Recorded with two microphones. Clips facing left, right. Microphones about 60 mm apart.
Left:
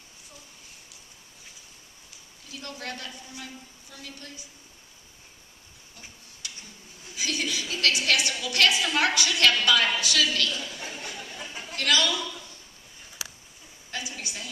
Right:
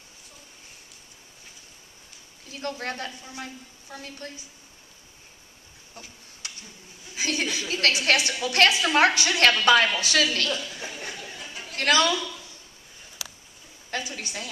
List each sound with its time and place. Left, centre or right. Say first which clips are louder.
2.5 s a woman's voice: right 5 dB; right
6.4 s a sound: right 1 dB; right
7.2 s a woman's voice: right 2 dB; right
11.7 s a man's voice: right 4 dB; right
13.8 s a woman's voice: right 4 dB; right